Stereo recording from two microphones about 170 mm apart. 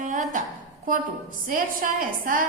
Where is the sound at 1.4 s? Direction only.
55° right (ahead or behind).